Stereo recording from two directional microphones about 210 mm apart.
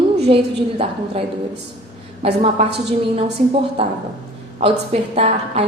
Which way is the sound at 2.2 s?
30° right (ahead or behind).